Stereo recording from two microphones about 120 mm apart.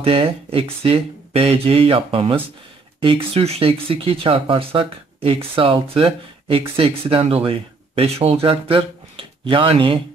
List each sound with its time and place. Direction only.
0.0 s speech: 50° right (ahead or behind)